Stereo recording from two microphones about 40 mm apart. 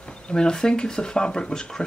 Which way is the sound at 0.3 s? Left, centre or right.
Centre.